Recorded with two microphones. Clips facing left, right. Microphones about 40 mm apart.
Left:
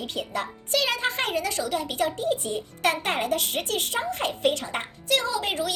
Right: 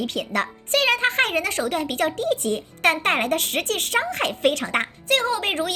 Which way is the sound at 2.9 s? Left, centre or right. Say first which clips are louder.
Right 4 dB; right.